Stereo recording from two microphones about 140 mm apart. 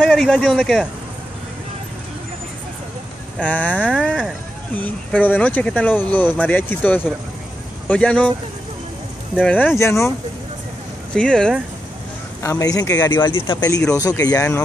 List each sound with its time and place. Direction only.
0.0 s a man's voice: 10° left (ahead or behind)
3.3 s speech: 10° left (ahead or behind)
3.7 s speech: 10° right (ahead or behind)
4.7 s speech: 10° left (ahead or behind)
9.4 s speech: 10° left (ahead or behind)
11.1 s a man's voice: 5° left (ahead or behind)
12.4 s speech: 25° left (ahead or behind)
14.3 s speech: 10° left (ahead or behind)